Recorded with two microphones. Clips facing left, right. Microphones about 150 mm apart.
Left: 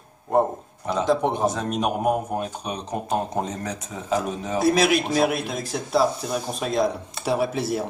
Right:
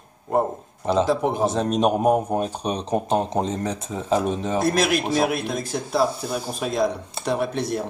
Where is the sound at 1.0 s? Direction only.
Centre (ahead or behind).